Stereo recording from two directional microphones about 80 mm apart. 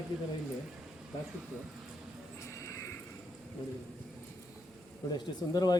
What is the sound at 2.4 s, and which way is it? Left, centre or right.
Horse, left.